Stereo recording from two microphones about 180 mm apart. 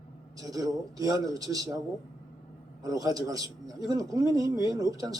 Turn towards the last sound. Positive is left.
turn(degrees=-20)  # may be behind; listen again after turning